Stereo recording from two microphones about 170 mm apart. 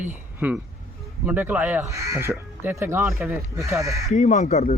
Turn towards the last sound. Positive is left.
turn(degrees=40)  # may be behind; listen again after turning